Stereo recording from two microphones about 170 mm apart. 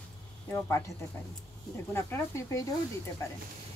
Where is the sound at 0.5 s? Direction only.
15° left (ahead or behind).